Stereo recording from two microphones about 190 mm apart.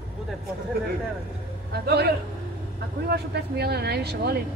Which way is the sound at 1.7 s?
60° right (ahead or behind).